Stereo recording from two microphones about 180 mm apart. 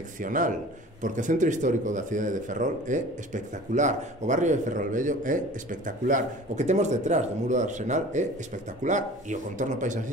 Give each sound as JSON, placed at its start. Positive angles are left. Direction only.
{"t": 0.2, "sound": "speech", "side_deg": -45}